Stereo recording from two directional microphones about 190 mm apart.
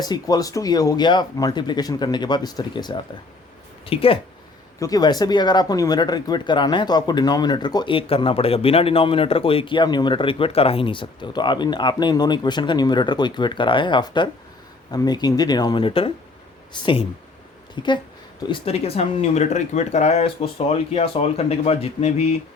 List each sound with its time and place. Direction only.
0.0 s speech: 20° left (ahead or behind)